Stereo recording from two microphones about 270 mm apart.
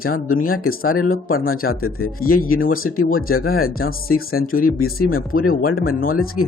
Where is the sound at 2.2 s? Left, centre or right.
Left.